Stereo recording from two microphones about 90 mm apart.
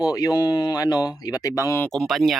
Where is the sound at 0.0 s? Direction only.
45° left (ahead or behind).